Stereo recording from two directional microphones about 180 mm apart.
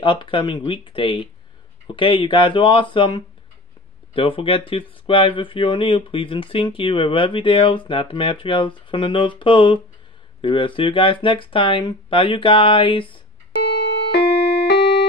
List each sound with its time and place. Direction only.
0.0 s speech: 25° left (ahead or behind)
13.7 s music: 60° left (ahead or behind)